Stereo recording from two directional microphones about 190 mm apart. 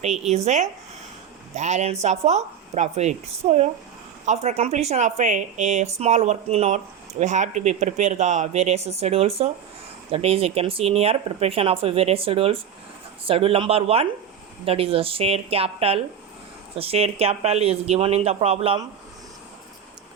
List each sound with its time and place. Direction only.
0.0 s speech: 35° right (ahead or behind)